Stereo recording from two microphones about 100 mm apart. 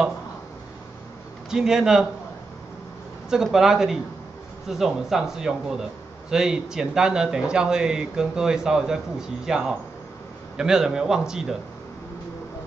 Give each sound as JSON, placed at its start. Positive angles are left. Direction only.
{"t": 1.5, "sound": "speech", "side_deg": -5}
{"t": 3.3, "sound": "speech", "side_deg": -5}